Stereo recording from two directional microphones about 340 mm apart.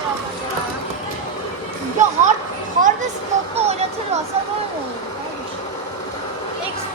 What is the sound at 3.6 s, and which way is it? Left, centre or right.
Speech, centre.